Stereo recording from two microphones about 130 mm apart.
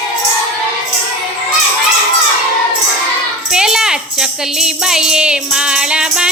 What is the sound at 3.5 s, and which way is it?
Music, 5° right (ahead or behind).